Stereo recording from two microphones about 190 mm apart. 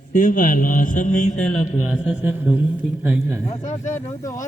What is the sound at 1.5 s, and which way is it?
A man's voice, centre (ahead or behind).